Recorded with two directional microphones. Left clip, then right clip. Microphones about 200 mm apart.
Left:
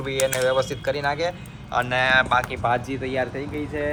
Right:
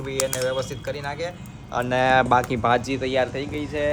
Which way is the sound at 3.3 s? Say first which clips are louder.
Right 1 dB; 10° right (ahead or behind).